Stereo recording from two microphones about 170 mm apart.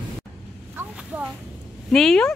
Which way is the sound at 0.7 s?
10° right (ahead or behind).